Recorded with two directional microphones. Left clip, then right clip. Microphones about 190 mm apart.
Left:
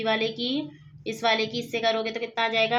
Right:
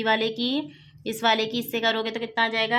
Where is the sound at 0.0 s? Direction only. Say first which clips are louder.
Right 2 dB; 30° right (ahead or behind).